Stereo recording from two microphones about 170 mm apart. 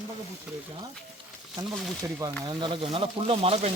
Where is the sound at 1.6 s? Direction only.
25° right (ahead or behind).